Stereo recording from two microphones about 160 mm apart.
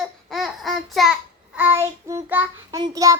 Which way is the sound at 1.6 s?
15° right (ahead or behind).